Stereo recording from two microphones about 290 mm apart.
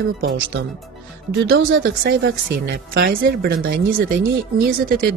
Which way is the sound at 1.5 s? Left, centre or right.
Right.